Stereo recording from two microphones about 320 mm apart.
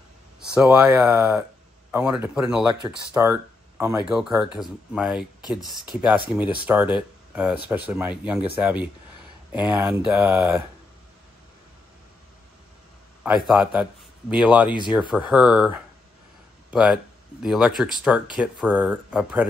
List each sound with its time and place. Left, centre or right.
0.4 s speech: centre
13.2 s speech: centre